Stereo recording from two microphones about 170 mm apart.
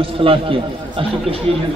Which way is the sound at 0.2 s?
30° right (ahead or behind).